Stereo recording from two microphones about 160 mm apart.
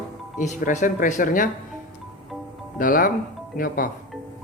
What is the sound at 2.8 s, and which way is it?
Speech, 55° left (ahead or behind).